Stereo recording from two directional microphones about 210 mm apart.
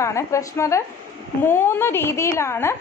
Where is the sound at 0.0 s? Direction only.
15° left (ahead or behind).